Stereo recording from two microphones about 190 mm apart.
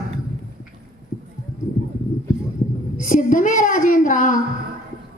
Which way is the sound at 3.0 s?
45° left (ahead or behind).